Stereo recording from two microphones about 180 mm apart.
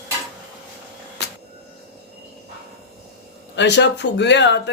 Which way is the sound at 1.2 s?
70° left (ahead or behind).